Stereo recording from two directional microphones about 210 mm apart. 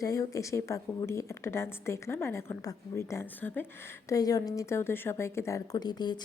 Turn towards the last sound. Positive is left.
turn(degrees=20)  # may be behind; listen again after turning